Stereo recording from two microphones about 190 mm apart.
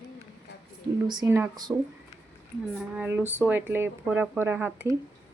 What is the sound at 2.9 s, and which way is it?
Speech, 10° right (ahead or behind).